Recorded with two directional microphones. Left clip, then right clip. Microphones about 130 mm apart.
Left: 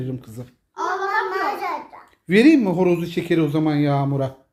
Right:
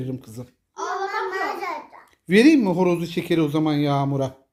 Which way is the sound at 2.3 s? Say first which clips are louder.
Left 1 dB; 30° right (ahead or behind).